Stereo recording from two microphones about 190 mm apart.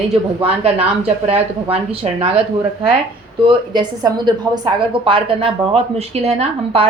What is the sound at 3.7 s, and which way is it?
A woman's voice, 20° right (ahead or behind).